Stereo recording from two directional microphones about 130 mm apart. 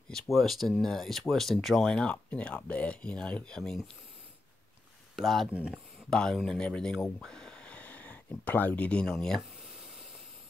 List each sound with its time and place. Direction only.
0.1 s speech: centre (ahead or behind)
5.1 s speech: centre (ahead or behind)